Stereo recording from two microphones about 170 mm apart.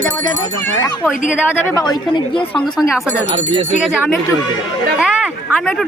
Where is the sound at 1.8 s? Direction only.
30° left (ahead or behind).